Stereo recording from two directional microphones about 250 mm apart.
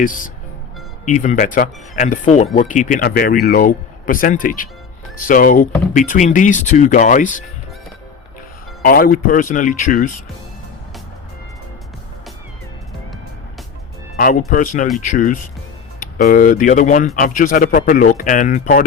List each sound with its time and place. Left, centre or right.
0.0 s speech: left
8.8 s speech: left
14.2 s speech: left